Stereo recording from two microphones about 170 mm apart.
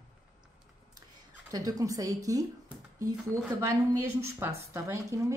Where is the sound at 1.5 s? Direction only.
20° right (ahead or behind).